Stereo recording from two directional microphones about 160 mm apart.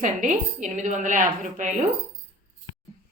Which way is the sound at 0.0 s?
50° right (ahead or behind).